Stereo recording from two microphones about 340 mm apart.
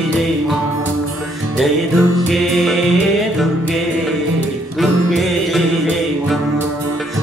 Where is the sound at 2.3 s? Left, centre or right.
Centre.